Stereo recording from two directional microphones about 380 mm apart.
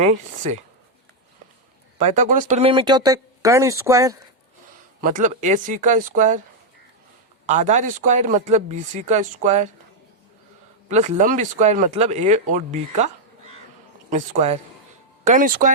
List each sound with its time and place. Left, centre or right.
0.0 s speech: centre
2.0 s speech: centre
4.9 s speech: right
7.4 s speech: centre
10.8 s speech: centre